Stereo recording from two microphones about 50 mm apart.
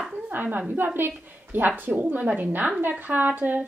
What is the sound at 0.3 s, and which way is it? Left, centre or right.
A woman's voice, right.